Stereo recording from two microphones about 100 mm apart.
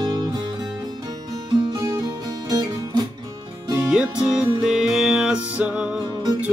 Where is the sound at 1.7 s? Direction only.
40° right (ahead or behind).